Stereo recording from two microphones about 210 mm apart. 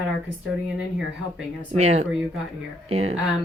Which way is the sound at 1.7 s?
30° right (ahead or behind).